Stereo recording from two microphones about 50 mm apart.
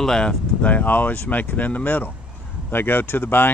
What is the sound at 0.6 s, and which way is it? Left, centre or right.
Speech, left.